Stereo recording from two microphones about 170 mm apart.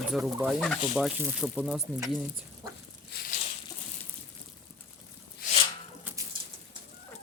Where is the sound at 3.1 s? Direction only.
65° left (ahead or behind).